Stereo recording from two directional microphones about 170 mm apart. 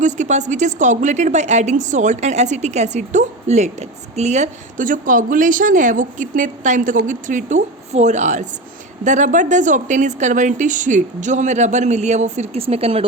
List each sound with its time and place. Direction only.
0.0 s a woman's voice: 45° right (ahead or behind)